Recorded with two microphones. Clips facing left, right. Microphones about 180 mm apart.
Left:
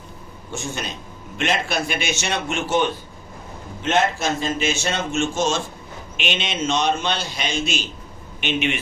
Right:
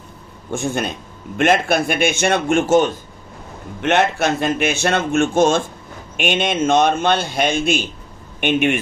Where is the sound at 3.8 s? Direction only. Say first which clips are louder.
Right 4 dB; 65° right (ahead or behind).